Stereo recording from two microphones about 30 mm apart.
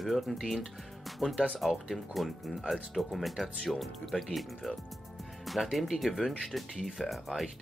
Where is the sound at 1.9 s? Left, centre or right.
Centre.